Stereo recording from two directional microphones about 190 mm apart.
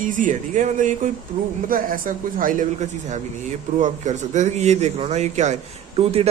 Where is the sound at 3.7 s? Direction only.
40° right (ahead or behind).